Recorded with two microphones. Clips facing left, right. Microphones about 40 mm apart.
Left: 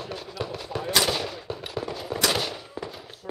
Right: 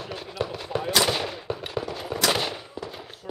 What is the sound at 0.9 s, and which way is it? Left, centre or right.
Gunshot, centre.